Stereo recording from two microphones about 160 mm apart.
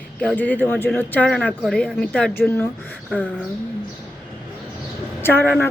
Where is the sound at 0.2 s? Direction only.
10° left (ahead or behind).